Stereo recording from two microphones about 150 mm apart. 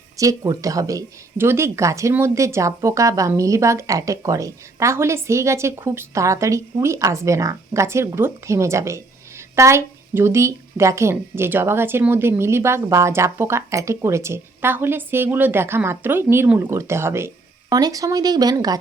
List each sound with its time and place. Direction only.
0.2 s speech: 20° right (ahead or behind)